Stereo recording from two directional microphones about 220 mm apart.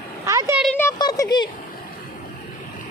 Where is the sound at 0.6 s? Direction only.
5° left (ahead or behind).